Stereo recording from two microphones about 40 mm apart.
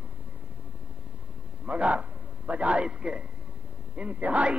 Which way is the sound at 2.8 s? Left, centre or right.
Right.